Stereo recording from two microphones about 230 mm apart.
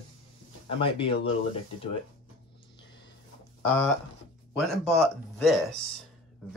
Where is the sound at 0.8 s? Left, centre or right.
Left.